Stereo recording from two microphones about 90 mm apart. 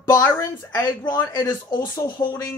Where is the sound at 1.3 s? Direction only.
50° left (ahead or behind).